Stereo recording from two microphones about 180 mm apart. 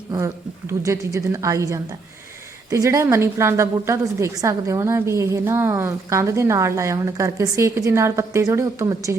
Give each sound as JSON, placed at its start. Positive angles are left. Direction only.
{"t": 0.7, "sound": "a woman's voice", "side_deg": -15}